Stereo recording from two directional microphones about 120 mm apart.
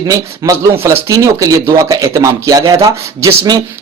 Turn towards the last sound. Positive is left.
turn(degrees=-30)  # may be behind; listen again after turning